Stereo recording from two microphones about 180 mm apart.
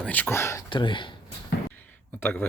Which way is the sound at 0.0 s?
10° left (ahead or behind).